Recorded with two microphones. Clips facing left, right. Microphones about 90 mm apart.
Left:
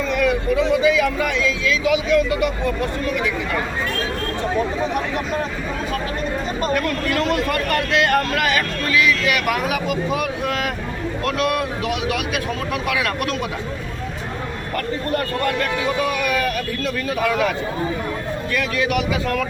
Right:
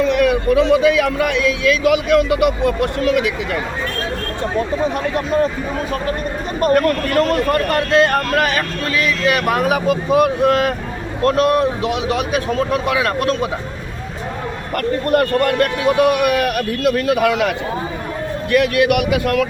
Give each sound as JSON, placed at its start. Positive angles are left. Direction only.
{"t": 0.0, "sound": "speech", "side_deg": -65}
{"t": 6.6, "sound": "speech", "side_deg": -50}
{"t": 15.1, "sound": "a man's voice", "side_deg": -65}
{"t": 18.5, "sound": "a man's voice", "side_deg": -65}